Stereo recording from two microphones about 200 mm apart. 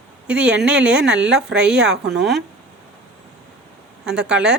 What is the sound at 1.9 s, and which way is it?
Speech, 55° right (ahead or behind).